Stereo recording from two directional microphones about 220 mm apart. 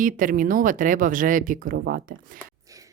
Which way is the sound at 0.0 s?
40° right (ahead or behind).